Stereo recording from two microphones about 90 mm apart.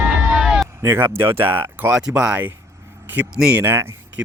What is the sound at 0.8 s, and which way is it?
Speech, 25° right (ahead or behind).